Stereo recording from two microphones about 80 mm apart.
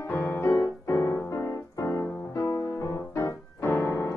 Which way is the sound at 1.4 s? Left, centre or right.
Left.